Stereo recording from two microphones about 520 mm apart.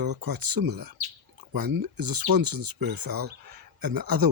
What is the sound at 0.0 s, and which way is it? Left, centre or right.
Speech, right.